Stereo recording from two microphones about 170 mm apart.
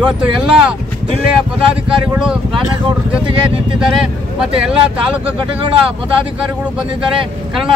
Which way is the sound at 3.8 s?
5° right (ahead or behind).